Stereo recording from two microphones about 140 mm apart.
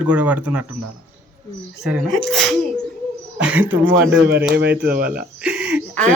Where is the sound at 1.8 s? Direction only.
Centre (ahead or behind).